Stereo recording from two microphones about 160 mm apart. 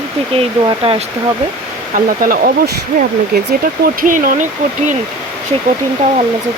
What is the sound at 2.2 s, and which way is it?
Speech, 65° right (ahead or behind).